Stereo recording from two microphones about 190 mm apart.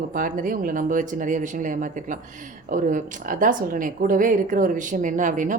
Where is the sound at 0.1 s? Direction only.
45° right (ahead or behind).